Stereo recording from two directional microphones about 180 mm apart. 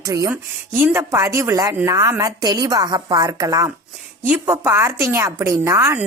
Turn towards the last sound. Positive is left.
turn(degrees=-15)  # may be behind; listen again after turning